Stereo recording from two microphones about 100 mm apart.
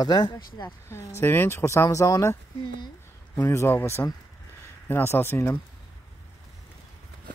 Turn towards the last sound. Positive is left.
turn(degrees=25)  # may be behind; listen again after turning